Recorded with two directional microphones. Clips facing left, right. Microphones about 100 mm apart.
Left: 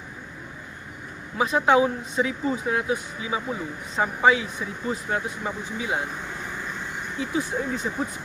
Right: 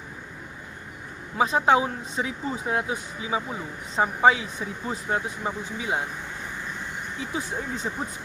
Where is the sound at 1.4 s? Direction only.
30° right (ahead or behind).